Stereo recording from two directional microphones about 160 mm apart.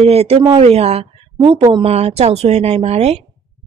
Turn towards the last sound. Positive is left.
turn(degrees=-40)  # may be behind; listen again after turning